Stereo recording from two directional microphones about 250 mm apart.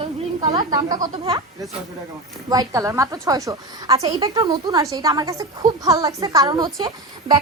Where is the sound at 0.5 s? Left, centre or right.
Centre.